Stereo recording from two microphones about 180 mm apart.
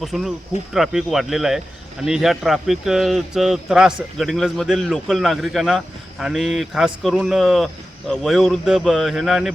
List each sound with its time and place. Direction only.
0.0 s speech: centre (ahead or behind)